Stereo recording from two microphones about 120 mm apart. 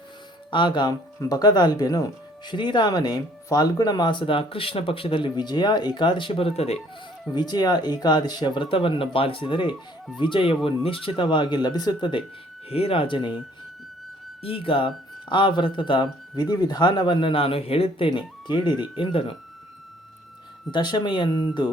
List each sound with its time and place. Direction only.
0.5 s speech: 40° left (ahead or behind); by 6.7 s 55° left (ahead or behind)
7.3 s speech: 35° left (ahead or behind)
12.6 s speech: 55° left (ahead or behind)
14.4 s speech: 50° left (ahead or behind)
20.7 s speech: 40° left (ahead or behind)